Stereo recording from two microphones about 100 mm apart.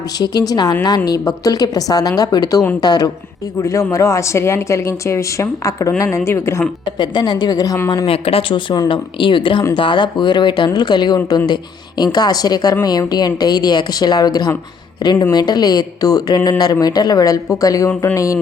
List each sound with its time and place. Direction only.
0.2 s a woman's voice: 40° left (ahead or behind)
3.6 s a woman's voice: 30° left (ahead or behind)
7.0 s a woman's voice: 45° left (ahead or behind)
8.0 s a woman's voice: 70° left (ahead or behind); by 18.3 s 35° left (ahead or behind)